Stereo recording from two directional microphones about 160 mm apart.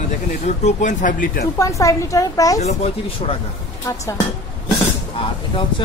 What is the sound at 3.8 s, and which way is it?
Speech, 20° left (ahead or behind).